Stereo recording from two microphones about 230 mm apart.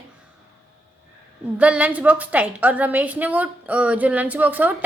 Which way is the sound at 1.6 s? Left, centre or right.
Centre.